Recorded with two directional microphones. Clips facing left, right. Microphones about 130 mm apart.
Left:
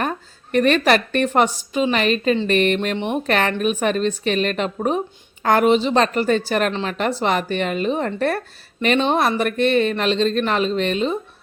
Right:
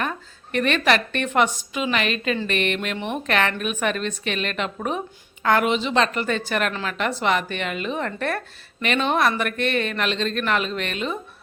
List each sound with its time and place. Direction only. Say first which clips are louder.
0.0 s a woman's voice: left 3 dB; 40° left (ahead or behind)